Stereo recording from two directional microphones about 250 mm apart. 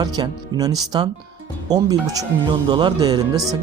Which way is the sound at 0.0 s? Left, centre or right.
Centre.